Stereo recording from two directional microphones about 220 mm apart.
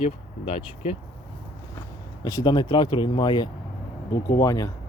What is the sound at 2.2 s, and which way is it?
Speech, 15° left (ahead or behind).